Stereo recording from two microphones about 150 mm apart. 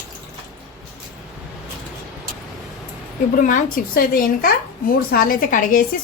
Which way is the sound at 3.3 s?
65° left (ahead or behind).